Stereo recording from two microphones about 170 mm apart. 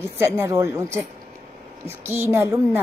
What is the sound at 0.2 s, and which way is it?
Speech, 15° right (ahead or behind).